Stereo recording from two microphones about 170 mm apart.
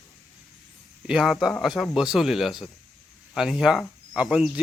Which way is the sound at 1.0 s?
Centre (ahead or behind).